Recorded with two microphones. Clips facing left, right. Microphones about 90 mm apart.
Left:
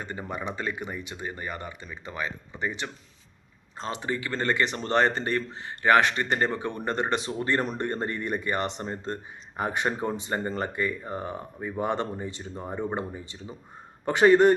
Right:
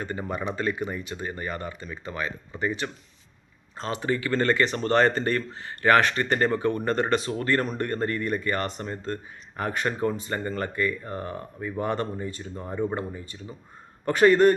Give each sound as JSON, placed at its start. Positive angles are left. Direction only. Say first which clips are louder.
{"t": 0.0, "sound": "speech", "louder": "right 3 dB", "side_deg": 15}